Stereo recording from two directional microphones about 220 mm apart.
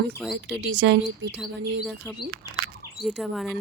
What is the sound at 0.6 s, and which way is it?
Speech, 55° right (ahead or behind).